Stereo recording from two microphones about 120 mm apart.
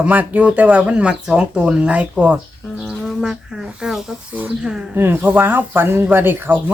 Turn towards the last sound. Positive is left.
turn(degrees=-15)  # may be behind; listen again after turning